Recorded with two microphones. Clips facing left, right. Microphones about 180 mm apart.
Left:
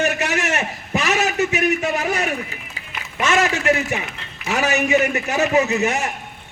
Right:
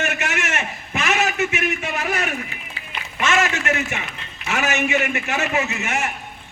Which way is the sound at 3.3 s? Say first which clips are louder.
Left 4 dB; 35° left (ahead or behind).